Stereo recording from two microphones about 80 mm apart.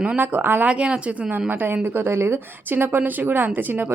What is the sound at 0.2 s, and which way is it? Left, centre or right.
Speech, right.